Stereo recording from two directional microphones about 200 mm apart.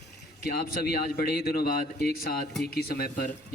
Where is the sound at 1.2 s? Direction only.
50° left (ahead or behind).